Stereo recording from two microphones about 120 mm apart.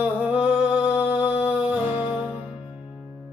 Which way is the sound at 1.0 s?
55° left (ahead or behind).